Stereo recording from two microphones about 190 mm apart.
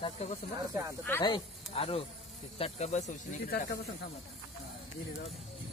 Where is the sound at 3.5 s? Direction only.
55° left (ahead or behind).